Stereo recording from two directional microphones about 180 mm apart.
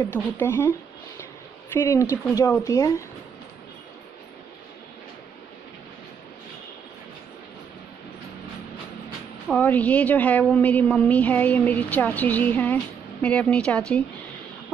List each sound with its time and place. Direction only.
0.0 s a woman's voice: 10° left (ahead or behind)
9.5 s a woman's voice: 10° left (ahead or behind)